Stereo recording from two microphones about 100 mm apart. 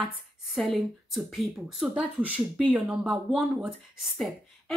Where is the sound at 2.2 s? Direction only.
15° right (ahead or behind).